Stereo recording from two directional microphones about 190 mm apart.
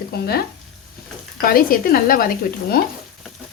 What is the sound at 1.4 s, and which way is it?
Speech, 50° left (ahead or behind).